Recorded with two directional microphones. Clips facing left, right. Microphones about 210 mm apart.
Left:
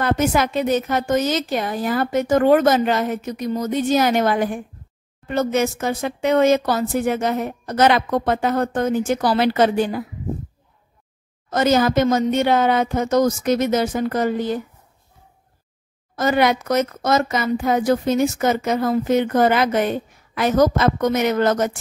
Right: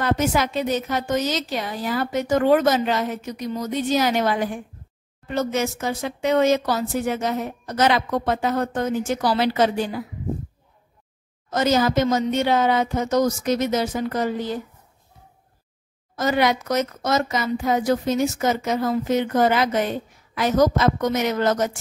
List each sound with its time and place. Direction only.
0.0 s a woman's voice: 55° left (ahead or behind)
11.5 s speech: 55° left (ahead or behind)
16.2 s speech: 55° left (ahead or behind)